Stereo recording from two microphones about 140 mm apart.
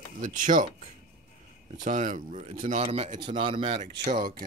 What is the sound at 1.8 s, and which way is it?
Speech, 65° right (ahead or behind).